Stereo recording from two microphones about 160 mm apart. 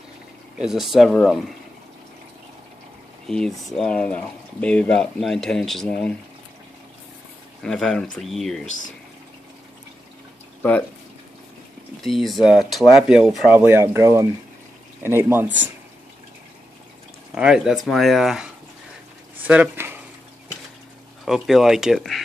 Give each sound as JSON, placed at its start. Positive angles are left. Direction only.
{"t": 0.6, "sound": "speech", "side_deg": 0}
{"t": 3.3, "sound": "speech", "side_deg": 5}
{"t": 7.6, "sound": "speech", "side_deg": 5}
{"t": 12.0, "sound": "speech", "side_deg": 0}
{"t": 13.5, "sound": "speech", "side_deg": -15}
{"t": 17.3, "sound": "speech", "side_deg": -5}
{"t": 19.4, "sound": "a sound", "side_deg": -10}
{"t": 21.3, "sound": "speech", "side_deg": 0}